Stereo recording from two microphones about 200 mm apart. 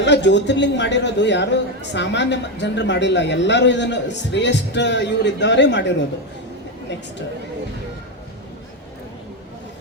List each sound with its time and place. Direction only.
0.0 s a man's voice: 60° left (ahead or behind)